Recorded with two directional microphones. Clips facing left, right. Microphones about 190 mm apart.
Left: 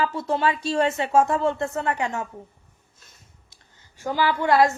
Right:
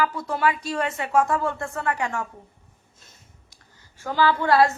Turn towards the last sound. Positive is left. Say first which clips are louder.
# even
turn(degrees=15)  # may be behind; listen again after turning